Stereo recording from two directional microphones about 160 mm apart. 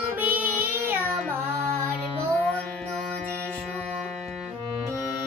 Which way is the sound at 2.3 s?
5° left (ahead or behind).